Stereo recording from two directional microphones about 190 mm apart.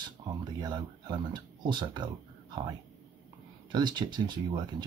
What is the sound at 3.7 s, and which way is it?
Speech, 25° right (ahead or behind).